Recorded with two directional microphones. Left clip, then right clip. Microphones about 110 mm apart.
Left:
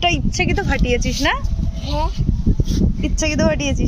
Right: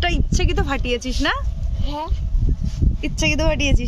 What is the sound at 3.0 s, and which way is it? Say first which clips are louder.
Speech: right 1 dB; 20° right (ahead or behind).